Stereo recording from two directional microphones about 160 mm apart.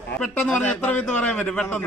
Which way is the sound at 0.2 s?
5° left (ahead or behind).